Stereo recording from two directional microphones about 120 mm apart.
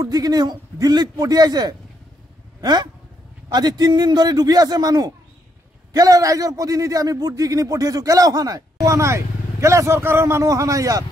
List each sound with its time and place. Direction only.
0.0 s a man's voice: 35° right (ahead or behind)